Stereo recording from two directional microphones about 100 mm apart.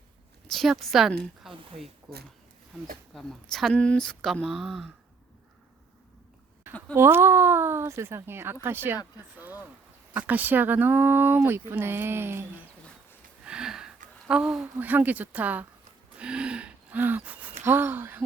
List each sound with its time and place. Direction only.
0.4 s speech: centre (ahead or behind)
6.9 s speech: 25° right (ahead or behind)
13.4 s speech: 10° right (ahead or behind)
16.1 s a sound: 10° right (ahead or behind)